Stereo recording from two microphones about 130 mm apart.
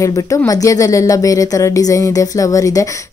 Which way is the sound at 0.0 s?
25° left (ahead or behind).